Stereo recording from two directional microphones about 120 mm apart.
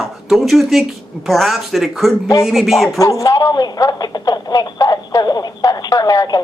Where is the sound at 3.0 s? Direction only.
30° left (ahead or behind).